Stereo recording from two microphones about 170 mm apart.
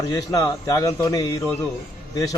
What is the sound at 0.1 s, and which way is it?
A man's voice, 20° left (ahead or behind).